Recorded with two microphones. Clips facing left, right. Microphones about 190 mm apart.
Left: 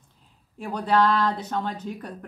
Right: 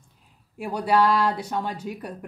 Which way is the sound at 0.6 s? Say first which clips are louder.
Right 1 dB; 10° right (ahead or behind).